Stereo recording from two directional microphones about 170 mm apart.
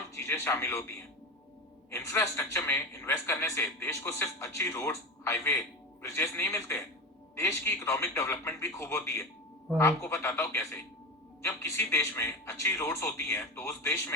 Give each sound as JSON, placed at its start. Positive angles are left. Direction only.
{"t": 0.2, "sound": "a man's voice", "side_deg": 15}